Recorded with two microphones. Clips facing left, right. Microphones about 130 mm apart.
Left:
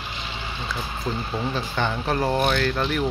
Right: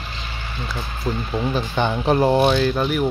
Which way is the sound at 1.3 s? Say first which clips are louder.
Right 7 dB; 15° right (ahead or behind).